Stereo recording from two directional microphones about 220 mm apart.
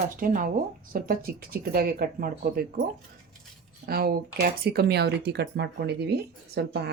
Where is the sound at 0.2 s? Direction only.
40° right (ahead or behind).